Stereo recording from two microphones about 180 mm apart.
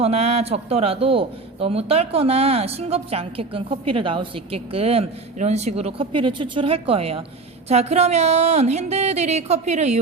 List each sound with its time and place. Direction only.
0.0 s a man's voice: 35° right (ahead or behind)